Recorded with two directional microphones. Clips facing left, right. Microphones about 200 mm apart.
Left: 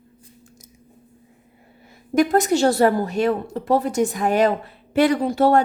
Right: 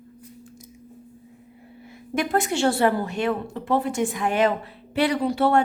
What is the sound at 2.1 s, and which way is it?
A woman's voice, 40° left (ahead or behind).